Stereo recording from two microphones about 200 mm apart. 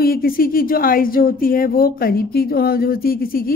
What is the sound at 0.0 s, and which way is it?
A woman's voice, 45° left (ahead or behind).